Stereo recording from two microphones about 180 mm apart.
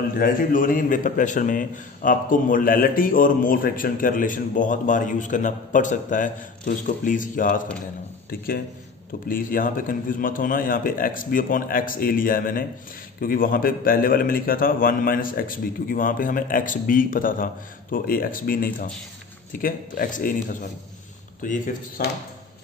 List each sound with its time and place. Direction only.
0.1 s a man's voice: 55° left (ahead or behind)
9.3 s a man's voice: 50° left (ahead or behind)
21.4 s a man's voice: 50° left (ahead or behind)